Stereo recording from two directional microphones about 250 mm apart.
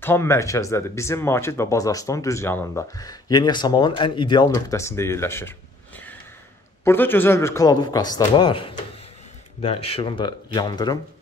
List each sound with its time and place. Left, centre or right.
0.0 s speech: centre
6.8 s speech: centre